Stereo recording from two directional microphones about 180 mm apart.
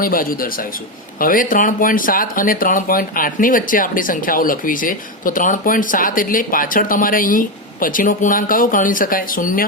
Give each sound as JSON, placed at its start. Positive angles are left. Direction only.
{"t": 0.0, "sound": "speech", "side_deg": 50}